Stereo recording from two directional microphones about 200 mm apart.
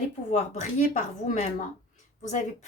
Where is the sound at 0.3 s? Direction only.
35° left (ahead or behind).